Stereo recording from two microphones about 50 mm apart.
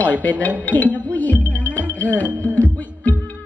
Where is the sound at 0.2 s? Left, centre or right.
Left.